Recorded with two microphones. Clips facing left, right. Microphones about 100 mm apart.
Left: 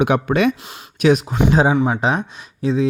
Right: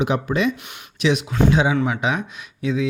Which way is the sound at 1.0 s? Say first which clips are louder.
Left 4 dB; 45° left (ahead or behind).